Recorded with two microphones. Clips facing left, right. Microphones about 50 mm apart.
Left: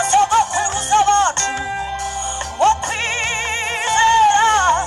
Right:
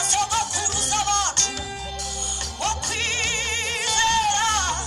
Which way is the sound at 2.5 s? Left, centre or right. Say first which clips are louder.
Left 11 dB; left.